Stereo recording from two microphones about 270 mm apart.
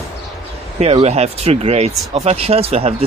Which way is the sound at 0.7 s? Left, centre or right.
Right.